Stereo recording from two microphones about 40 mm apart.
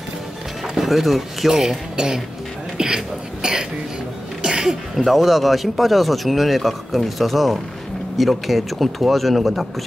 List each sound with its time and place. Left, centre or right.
0.7 s speech: centre
3.4 s speech: right
4.4 s cough: centre
5.0 s speech: centre